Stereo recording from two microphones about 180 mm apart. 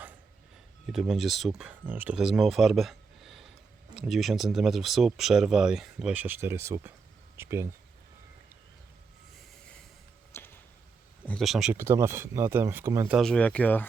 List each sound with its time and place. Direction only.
0.9 s speech: centre (ahead or behind)
10.3 s a sound: 10° left (ahead or behind)
11.3 s speech: centre (ahead or behind)
11.8 s speech: 15° right (ahead or behind)
13.1 s speech: 5° left (ahead or behind)